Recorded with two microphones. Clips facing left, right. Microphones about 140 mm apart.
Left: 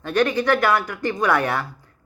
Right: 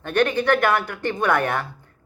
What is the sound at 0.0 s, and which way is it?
Speech, 55° right (ahead or behind).